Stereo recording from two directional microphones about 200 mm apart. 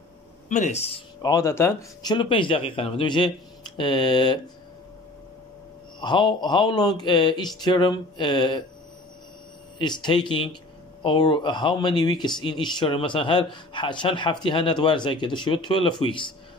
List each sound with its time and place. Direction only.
0.5 s speech: 35° left (ahead or behind)
1.2 s speech: 15° left (ahead or behind)
5.9 s speech: 20° left (ahead or behind)
9.8 s speech: 20° left (ahead or behind)